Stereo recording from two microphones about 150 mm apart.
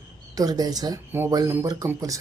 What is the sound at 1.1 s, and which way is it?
Speech, 15° right (ahead or behind).